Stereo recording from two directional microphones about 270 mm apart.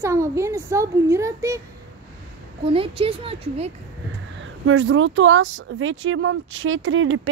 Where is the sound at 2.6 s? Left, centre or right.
Centre.